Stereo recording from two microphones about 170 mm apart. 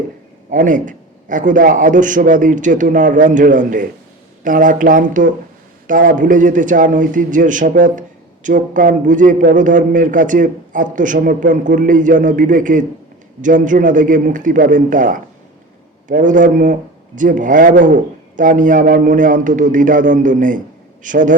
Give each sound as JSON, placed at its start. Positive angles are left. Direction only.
{"t": 0.5, "sound": "a man's voice", "side_deg": -50}